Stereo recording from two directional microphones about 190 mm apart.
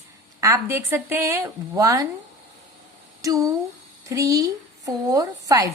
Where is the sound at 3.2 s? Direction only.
15° right (ahead or behind).